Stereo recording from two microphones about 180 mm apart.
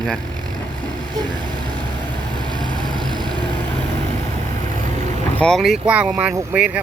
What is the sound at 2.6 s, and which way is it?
Vehicle, 25° right (ahead or behind).